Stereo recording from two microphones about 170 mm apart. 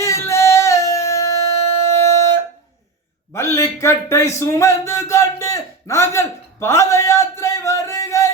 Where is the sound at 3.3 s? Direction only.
15° left (ahead or behind).